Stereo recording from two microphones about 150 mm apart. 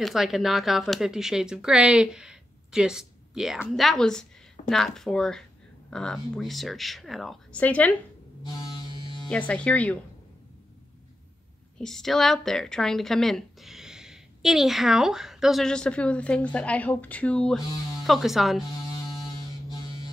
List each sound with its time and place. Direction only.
0.0 s a woman's voice: centre (ahead or behind)
8.5 s music: 30° left (ahead or behind)
9.5 s speech: 10° left (ahead or behind)
11.8 s a woman's voice: centre (ahead or behind)